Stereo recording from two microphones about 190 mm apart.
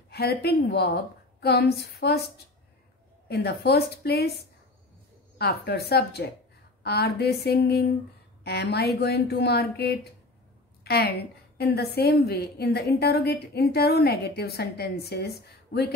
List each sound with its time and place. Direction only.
0.1 s a woman's voice: 55° left (ahead or behind)
3.3 s a woman's voice: 60° left (ahead or behind)
10.8 s a sound: 60° left (ahead or behind)
11.5 s a woman's voice: 60° left (ahead or behind)